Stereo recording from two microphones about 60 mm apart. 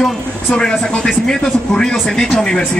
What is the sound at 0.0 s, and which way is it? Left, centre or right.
Speech, centre.